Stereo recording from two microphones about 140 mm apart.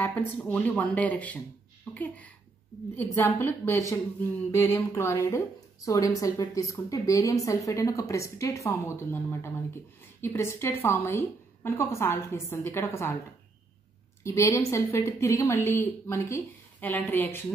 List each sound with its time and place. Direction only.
0.0 s a woman's voice: 10° left (ahead or behind)
14.2 s a woman's voice: 20° left (ahead or behind)